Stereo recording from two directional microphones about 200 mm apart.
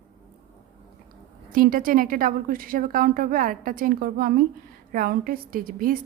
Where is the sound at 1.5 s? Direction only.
45° right (ahead or behind).